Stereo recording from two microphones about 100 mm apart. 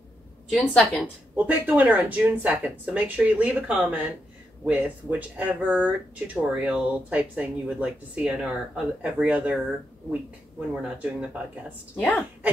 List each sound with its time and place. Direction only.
0.5 s a woman's voice: centre (ahead or behind)
1.3 s speech: 15° right (ahead or behind)
10.7 s speech: 10° right (ahead or behind)